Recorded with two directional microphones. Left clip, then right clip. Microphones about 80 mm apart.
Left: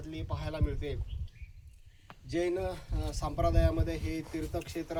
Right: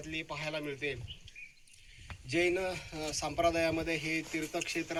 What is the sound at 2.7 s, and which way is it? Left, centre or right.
Speech, left.